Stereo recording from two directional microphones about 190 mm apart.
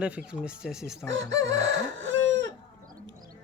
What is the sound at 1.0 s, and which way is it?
Chicken, 70° right (ahead or behind).